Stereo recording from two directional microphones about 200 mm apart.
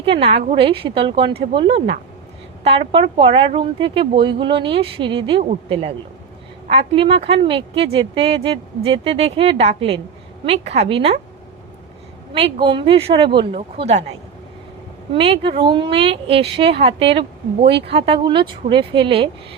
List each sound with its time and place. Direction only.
0.0 s a woman's voice: 30° right (ahead or behind)
12.3 s a woman's voice: 25° right (ahead or behind)
15.1 s a woman's voice: 25° right (ahead or behind)
17.6 s speech: 60° right (ahead or behind)
17.8 s a woman's voice: 30° right (ahead or behind)